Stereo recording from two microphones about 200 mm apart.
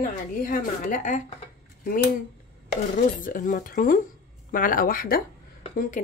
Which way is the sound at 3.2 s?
40° left (ahead or behind).